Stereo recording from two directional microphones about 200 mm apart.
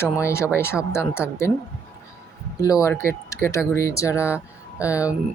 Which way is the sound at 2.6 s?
15° left (ahead or behind).